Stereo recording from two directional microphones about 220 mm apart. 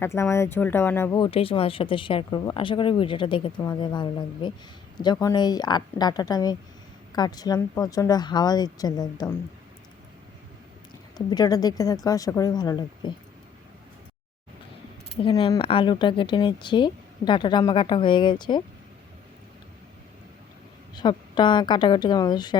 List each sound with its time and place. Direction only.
0.0 s speech: 10° left (ahead or behind)
11.3 s speech: 15° left (ahead or behind)
15.1 s speech: 20° left (ahead or behind)
20.9 s speech: 20° left (ahead or behind)